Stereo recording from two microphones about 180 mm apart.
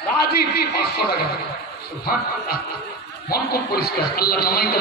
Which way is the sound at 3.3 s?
60° left (ahead or behind).